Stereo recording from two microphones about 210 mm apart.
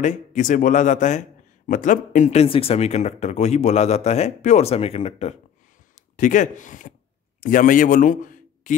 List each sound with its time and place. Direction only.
0.0 s a man's voice: 35° left (ahead or behind)